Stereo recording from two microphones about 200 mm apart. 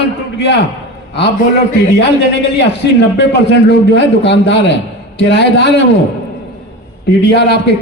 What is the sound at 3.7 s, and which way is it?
A man's voice, 60° left (ahead or behind).